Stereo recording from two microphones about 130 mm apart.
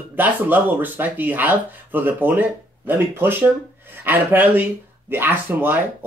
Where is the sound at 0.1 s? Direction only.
15° right (ahead or behind).